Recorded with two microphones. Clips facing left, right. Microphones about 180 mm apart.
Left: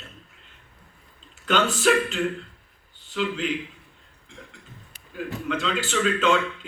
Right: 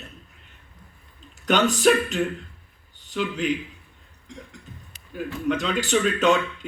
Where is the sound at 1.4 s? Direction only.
40° right (ahead or behind).